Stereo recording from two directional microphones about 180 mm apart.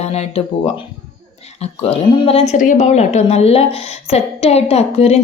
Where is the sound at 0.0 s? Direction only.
35° left (ahead or behind).